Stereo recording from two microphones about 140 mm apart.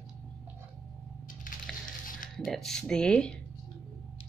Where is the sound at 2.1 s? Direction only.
80° left.